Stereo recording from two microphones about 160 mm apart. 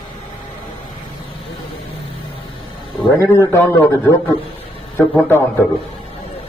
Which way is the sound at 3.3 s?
15° left (ahead or behind).